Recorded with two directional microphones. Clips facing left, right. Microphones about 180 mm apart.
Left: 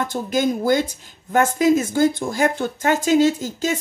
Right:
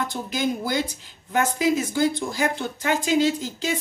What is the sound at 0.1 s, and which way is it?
A woman's voice, 50° left (ahead or behind).